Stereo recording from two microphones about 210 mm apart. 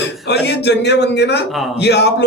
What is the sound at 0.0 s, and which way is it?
A man's voice, 55° left (ahead or behind).